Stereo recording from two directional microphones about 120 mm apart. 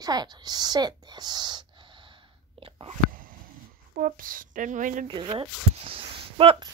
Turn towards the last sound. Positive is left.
turn(degrees=-50)  # may be behind; listen again after turning